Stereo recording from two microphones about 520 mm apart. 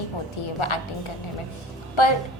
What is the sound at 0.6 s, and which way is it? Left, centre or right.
Speech, left.